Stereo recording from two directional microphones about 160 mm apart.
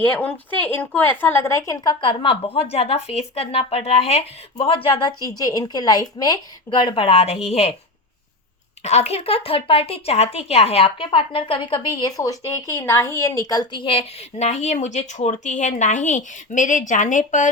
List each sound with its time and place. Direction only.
0.1 s a woman's voice: 10° left (ahead or behind); by 7.7 s 40° left (ahead or behind)
8.8 s a woman's voice: 40° left (ahead or behind)